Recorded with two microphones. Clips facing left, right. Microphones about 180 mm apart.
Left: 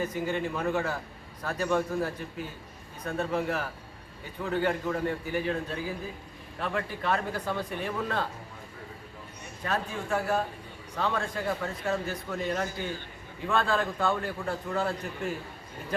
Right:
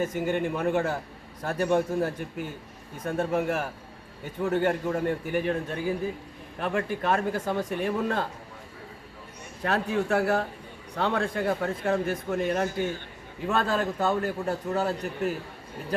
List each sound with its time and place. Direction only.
0.0 s speech: 50° right (ahead or behind)
9.6 s a man's voice: 65° right (ahead or behind); by 15.4 s 40° right (ahead or behind)